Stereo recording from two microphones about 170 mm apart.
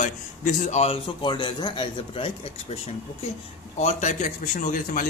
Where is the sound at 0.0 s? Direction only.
45° left (ahead or behind).